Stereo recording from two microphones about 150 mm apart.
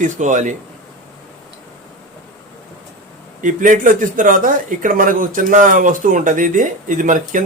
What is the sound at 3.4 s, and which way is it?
A man's voice, 60° right (ahead or behind).